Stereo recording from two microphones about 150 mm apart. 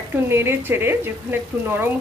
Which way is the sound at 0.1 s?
15° right (ahead or behind).